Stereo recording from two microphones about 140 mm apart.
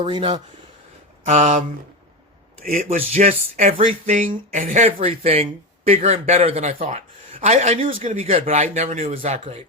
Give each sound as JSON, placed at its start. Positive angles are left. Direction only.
{"t": 0.0, "sound": "speech", "side_deg": -40}
{"t": 1.2, "sound": "speech", "side_deg": -50}
{"t": 2.7, "sound": "speech", "side_deg": -55}
{"t": 4.2, "sound": "speech", "side_deg": -75}
{"t": 4.9, "sound": "speech", "side_deg": -45}
{"t": 8.0, "sound": "speech", "side_deg": -60}